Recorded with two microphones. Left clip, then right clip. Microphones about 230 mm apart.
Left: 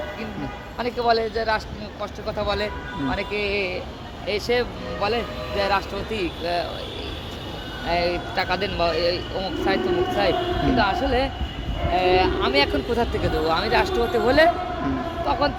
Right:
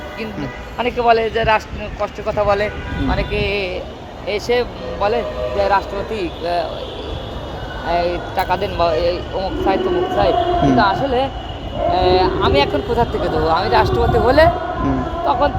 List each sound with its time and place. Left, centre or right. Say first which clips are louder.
0.8 s a man's voice: right 7 dB; right
4.3 s speech: right 5 dB; centre
4.9 s speech: right 7 dB; centre
7.9 s speech: right 5 dB; centre